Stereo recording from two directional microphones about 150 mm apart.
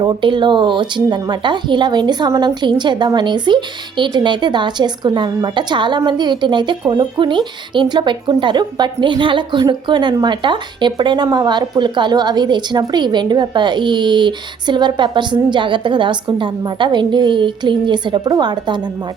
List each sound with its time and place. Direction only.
0.0 s a woman's voice: 30° right (ahead or behind)